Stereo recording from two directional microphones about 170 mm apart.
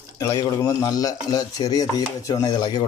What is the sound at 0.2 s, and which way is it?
Stir, 20° left (ahead or behind).